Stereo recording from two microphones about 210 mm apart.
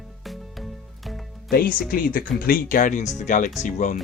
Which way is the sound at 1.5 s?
45° left (ahead or behind).